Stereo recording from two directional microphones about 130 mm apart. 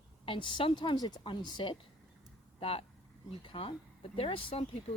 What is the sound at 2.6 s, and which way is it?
Speech, 45° left (ahead or behind).